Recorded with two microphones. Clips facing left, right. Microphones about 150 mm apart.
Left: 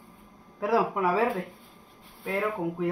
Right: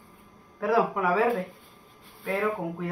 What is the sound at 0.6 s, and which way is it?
Speech, 20° left (ahead or behind).